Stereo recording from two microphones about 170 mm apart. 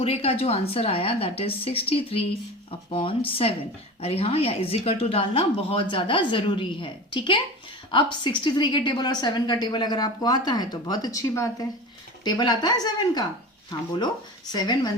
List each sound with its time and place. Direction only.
0.0 s a woman's voice: 35° left (ahead or behind)
14.5 s a woman's voice: 25° left (ahead or behind)